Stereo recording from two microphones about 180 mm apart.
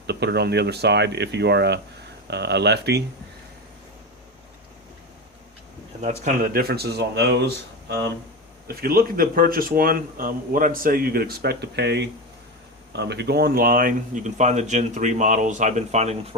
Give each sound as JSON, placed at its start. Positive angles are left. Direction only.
{"t": 0.1, "sound": "speech", "side_deg": -65}
{"t": 6.0, "sound": "speech", "side_deg": -45}
{"t": 8.6, "sound": "speech", "side_deg": -55}